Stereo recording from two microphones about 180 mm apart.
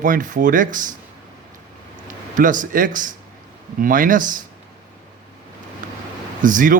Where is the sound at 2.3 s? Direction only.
45° right (ahead or behind).